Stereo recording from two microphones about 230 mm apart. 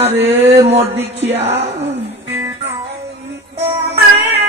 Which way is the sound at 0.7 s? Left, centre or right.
Right.